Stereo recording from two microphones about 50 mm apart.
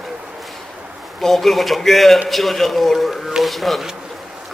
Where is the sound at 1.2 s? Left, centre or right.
Centre.